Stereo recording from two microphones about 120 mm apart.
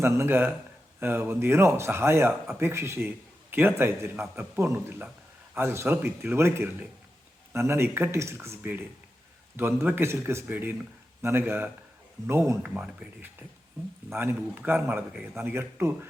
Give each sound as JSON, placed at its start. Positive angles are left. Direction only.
{"t": 0.0, "sound": "a man's voice", "side_deg": -20}